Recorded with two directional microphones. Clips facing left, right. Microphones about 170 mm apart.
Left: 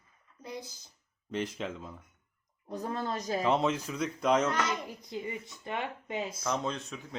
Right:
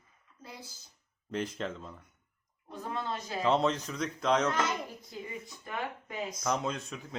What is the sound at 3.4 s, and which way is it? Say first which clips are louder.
Speech: right 2 dB; 5° left (ahead or behind).